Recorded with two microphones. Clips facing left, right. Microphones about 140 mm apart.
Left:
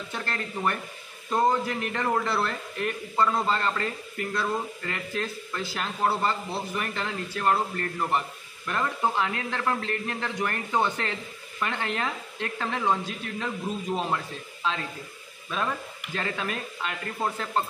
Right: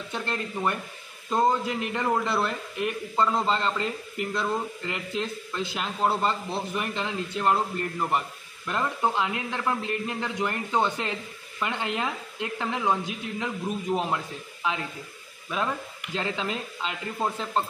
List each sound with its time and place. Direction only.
0.1 s speech: 20° right (ahead or behind)